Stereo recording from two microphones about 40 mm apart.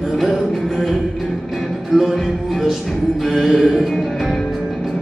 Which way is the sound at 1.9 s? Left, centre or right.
Centre.